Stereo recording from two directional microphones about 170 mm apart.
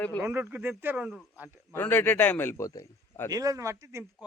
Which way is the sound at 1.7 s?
10° left (ahead or behind).